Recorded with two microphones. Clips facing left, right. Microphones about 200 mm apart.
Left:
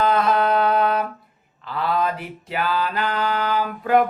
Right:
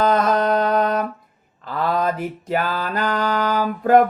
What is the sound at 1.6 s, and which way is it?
Mantra, 45° right (ahead or behind).